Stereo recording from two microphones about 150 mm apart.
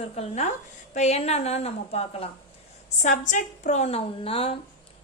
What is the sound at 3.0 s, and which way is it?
A woman's voice, 55° left (ahead or behind).